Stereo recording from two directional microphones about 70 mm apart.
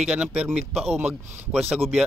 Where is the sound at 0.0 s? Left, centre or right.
Centre.